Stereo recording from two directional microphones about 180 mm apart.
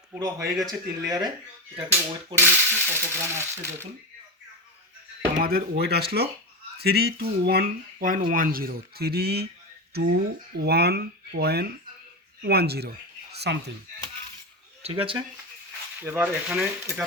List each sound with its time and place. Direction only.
0.1 s speech: 15° right (ahead or behind)
2.4 s speech: 10° right (ahead or behind)
5.4 s speech: 55° right (ahead or behind)
13.3 s a sound: 65° right (ahead or behind)
14.8 s speech: 30° right (ahead or behind)
16.0 s speech: 10° right (ahead or behind)